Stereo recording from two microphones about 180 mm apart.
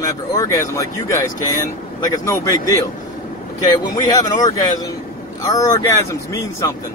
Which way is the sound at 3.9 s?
20° left (ahead or behind).